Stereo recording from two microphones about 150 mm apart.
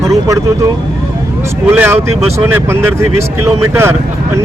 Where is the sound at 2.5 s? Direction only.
15° right (ahead or behind).